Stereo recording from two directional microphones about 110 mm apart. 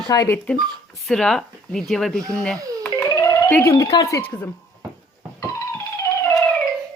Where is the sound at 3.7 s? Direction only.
35° left (ahead or behind).